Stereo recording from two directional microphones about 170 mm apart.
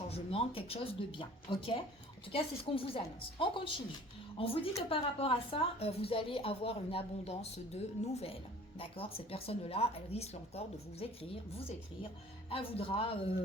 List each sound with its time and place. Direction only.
0.1 s a woman's voice: 35° left (ahead or behind)
12.5 s a woman's voice: 35° left (ahead or behind)